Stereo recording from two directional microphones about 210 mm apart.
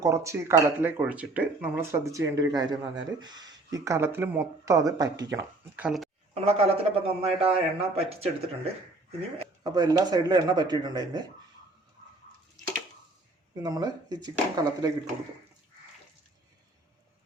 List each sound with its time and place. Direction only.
0.0 s speech: 15° right (ahead or behind)
6.3 s a man's voice: 30° right (ahead or behind)
9.4 s a man's voice: 20° right (ahead or behind)
13.6 s a man's voice: 20° right (ahead or behind)